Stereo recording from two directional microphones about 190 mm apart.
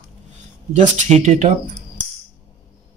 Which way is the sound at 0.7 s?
35° right (ahead or behind).